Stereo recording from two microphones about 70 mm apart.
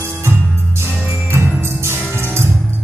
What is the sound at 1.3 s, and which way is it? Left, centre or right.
Music, right.